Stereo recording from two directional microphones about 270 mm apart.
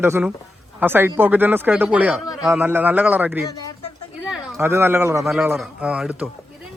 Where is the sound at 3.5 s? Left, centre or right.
Centre.